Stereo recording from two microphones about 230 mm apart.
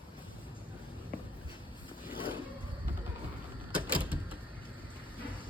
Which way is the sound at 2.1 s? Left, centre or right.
Left.